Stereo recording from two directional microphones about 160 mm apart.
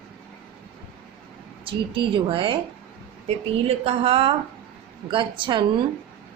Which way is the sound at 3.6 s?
40° right (ahead or behind).